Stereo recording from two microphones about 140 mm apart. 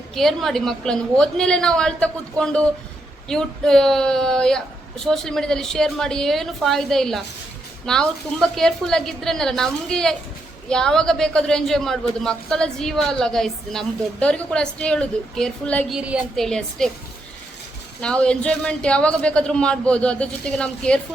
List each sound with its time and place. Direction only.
0.1 s a man's voice: centre (ahead or behind)
15.9 s a woman's voice: 10° right (ahead or behind)
16.3 s a man's voice: 5° left (ahead or behind)
18.0 s a man's voice: 5° left (ahead or behind)